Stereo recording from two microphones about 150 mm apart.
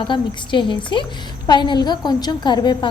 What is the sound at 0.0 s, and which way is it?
A woman's voice, 30° left (ahead or behind).